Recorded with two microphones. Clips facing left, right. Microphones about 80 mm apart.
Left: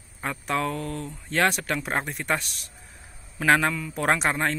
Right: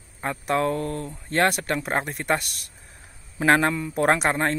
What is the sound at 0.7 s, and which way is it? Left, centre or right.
Speech, right.